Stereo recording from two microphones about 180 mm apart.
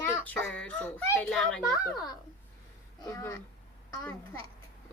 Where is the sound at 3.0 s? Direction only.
15° left (ahead or behind).